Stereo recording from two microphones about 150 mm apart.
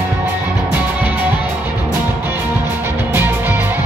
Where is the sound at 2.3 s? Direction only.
15° right (ahead or behind).